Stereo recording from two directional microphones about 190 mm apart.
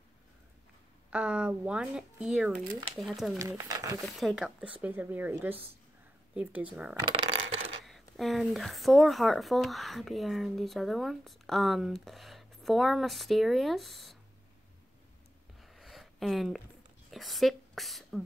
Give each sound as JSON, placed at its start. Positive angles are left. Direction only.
{"t": 1.1, "sound": "speech", "side_deg": -5}
{"t": 3.3, "sound": "speech", "side_deg": -15}
{"t": 4.0, "sound": "speech", "side_deg": 0}
{"t": 7.0, "sound": "coin", "side_deg": -25}
{"t": 7.2, "sound": "coin", "side_deg": -90}
{"t": 7.8, "sound": "speech", "side_deg": 0}
{"t": 15.6, "sound": "a sound", "side_deg": 0}
{"t": 17.1, "sound": "speech", "side_deg": 0}